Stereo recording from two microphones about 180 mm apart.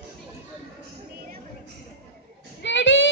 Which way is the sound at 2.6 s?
85° left.